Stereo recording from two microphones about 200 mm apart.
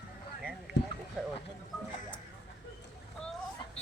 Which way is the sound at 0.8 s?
60° left (ahead or behind).